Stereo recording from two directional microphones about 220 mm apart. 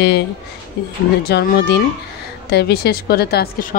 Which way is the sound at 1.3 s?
50° left (ahead or behind).